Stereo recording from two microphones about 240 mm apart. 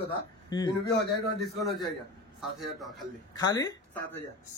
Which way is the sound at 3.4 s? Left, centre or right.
Centre.